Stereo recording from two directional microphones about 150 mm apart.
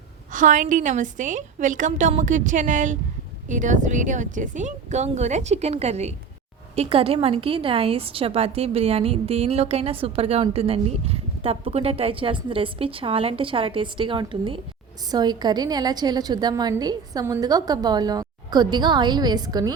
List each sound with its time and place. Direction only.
0.3 s a woman's voice: 60° right (ahead or behind); by 19.7 s 25° right (ahead or behind)